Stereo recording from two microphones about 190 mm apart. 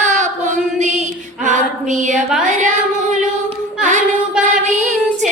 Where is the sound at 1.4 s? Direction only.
40° right (ahead or behind).